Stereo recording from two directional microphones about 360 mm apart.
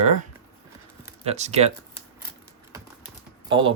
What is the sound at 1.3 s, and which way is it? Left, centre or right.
Speech, centre.